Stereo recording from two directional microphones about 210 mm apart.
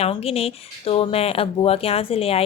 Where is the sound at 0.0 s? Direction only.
30° left (ahead or behind).